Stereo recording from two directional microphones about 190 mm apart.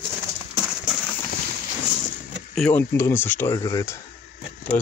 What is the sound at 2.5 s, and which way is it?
Speech, 10° left (ahead or behind).